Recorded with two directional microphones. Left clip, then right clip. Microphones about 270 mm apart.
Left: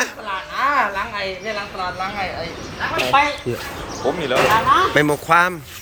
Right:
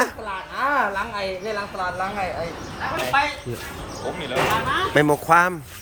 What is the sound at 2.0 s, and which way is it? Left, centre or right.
Speech, right.